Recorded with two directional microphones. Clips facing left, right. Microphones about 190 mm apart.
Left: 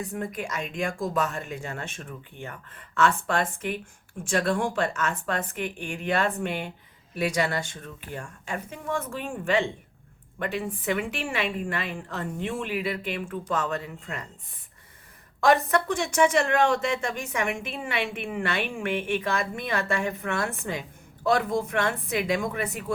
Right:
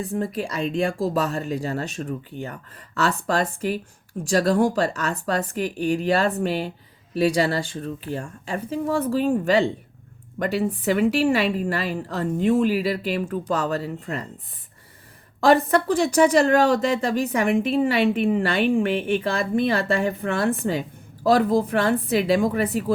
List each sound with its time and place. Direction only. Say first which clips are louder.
0.0 s speech: right 6 dB; 30° right (ahead or behind)
15.4 s speech: right 4 dB; 30° right (ahead or behind)